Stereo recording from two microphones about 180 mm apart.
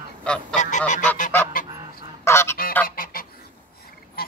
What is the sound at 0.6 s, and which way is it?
Goose, 40° left (ahead or behind).